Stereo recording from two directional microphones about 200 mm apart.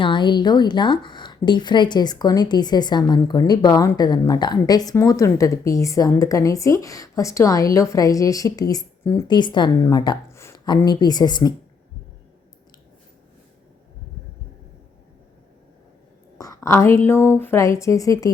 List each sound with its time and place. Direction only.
0.0 s speech: 25° left (ahead or behind)
16.4 s a sound: 15° left (ahead or behind)
17.1 s speech: 10° left (ahead or behind)